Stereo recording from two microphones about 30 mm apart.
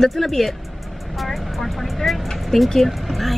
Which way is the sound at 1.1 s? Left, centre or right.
Centre.